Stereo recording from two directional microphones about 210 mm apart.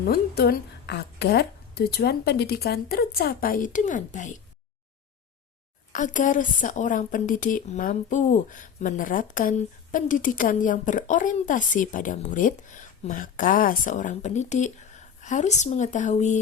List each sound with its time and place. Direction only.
0.0 s a woman's voice: 45° left (ahead or behind)
5.9 s a woman's voice: 35° left (ahead or behind)